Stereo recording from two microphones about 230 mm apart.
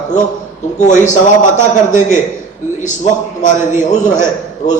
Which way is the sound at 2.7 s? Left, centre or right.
Left.